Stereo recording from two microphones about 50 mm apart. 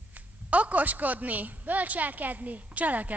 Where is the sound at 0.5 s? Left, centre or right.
Right.